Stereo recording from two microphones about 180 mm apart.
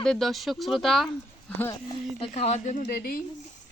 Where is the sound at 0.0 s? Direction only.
Centre (ahead or behind).